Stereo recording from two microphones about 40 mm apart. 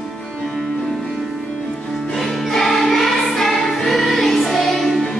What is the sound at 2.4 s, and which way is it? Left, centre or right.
Music, centre.